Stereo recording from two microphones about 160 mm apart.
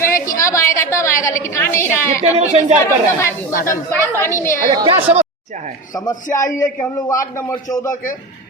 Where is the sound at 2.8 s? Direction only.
15° left (ahead or behind).